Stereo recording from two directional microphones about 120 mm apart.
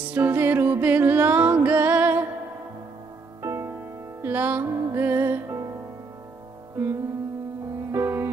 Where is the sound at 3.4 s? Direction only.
25° right (ahead or behind).